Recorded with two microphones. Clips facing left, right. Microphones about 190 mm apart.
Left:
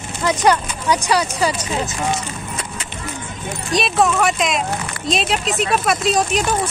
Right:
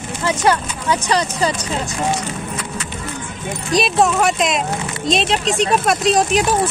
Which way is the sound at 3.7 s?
Centre (ahead or behind).